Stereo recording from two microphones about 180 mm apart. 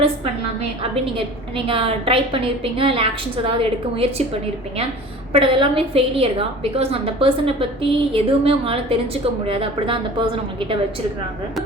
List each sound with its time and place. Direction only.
1.5 s a woman's voice: 30° right (ahead or behind)
5.3 s a woman's voice: 30° right (ahead or behind)